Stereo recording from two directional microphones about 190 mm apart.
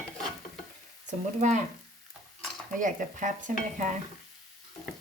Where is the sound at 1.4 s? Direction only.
40° right (ahead or behind).